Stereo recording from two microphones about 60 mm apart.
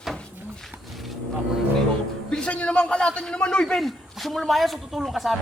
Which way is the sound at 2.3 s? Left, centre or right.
Centre.